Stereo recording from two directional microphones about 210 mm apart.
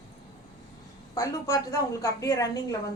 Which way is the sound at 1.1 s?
15° left (ahead or behind).